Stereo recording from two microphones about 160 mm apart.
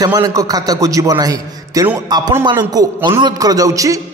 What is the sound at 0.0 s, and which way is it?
A man's voice, 20° right (ahead or behind).